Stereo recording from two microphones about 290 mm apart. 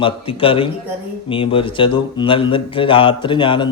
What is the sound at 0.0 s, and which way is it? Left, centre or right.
A man's voice, centre.